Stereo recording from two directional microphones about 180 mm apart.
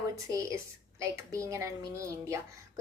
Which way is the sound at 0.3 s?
15° right (ahead or behind).